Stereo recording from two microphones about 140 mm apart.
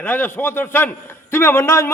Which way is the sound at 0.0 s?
15° left (ahead or behind).